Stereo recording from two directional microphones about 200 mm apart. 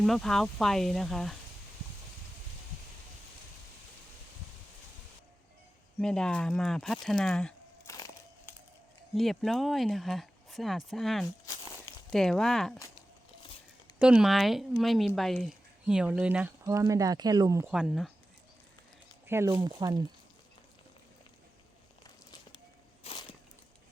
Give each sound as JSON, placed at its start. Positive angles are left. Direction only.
{"t": 0.0, "sound": "speech", "side_deg": 0}
{"t": 6.0, "sound": "speech", "side_deg": 5}
{"t": 7.9, "sound": "crushing", "side_deg": 15}
{"t": 9.1, "sound": "speech", "side_deg": 0}
{"t": 13.4, "sound": "a sound", "side_deg": 25}
{"t": 14.0, "sound": "speech", "side_deg": -5}
{"t": 17.7, "sound": "speech", "side_deg": -5}
{"t": 19.3, "sound": "speech", "side_deg": -15}
{"t": 23.1, "sound": "walk", "side_deg": 30}